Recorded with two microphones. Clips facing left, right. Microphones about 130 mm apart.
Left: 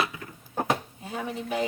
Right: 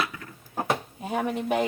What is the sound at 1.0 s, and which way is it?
Speech, 65° right (ahead or behind).